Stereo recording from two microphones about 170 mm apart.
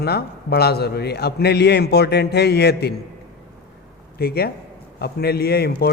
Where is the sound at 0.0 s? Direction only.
70° left (ahead or behind).